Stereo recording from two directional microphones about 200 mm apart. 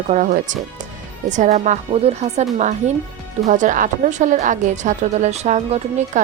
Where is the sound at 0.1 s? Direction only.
40° right (ahead or behind).